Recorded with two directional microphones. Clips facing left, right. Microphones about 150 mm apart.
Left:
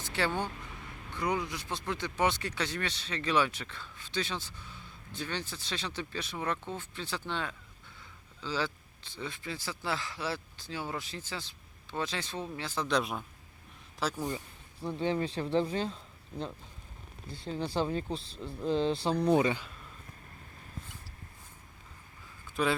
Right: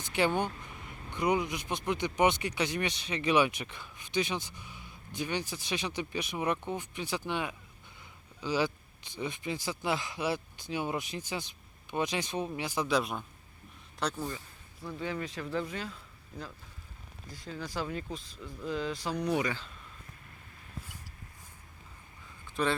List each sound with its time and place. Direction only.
0.0 s speech: 15° right (ahead or behind)
13.0 s a man's voice: centre (ahead or behind)
14.3 s speech: 30° left (ahead or behind)
17.2 s speech: 30° left (ahead or behind)
22.6 s a man's voice: centre (ahead or behind)